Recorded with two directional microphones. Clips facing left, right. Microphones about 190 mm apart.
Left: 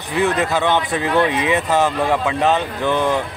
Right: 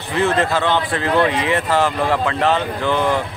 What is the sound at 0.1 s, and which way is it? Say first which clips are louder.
Speech: even; 15° left (ahead or behind).